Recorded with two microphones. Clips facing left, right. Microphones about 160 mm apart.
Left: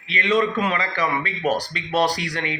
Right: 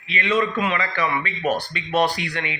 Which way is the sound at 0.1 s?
35° left (ahead or behind).